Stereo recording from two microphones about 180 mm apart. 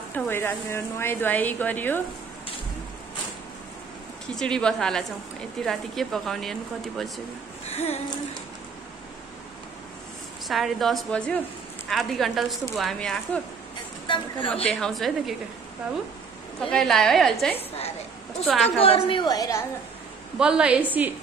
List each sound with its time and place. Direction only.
0.1 s speech: 10° left (ahead or behind)
4.4 s speech: 5° left (ahead or behind)
7.6 s a sound: 35° left (ahead or behind)
10.5 s speech: centre (ahead or behind)
14.0 s a woman's voice: 25° left (ahead or behind)
14.5 s speech: 5° left (ahead or behind)
16.7 s speech: centre (ahead or behind)
17.6 s a sound: 35° left (ahead or behind)
18.4 s speech: centre (ahead or behind)
18.8 s a woman's voice: 30° left (ahead or behind)
20.3 s a woman's voice: 5° right (ahead or behind)